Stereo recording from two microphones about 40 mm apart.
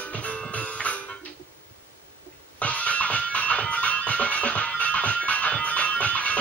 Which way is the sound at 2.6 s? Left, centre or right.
Left.